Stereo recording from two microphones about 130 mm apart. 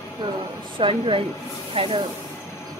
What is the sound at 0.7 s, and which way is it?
Speech, 45° right (ahead or behind).